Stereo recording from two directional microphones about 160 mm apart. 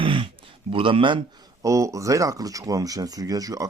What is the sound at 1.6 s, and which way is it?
A man's voice, 20° right (ahead or behind).